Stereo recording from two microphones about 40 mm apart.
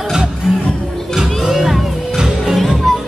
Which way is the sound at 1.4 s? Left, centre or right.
Centre.